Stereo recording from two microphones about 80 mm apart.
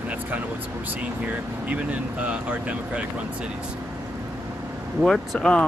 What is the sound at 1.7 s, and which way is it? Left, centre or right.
Speech, centre.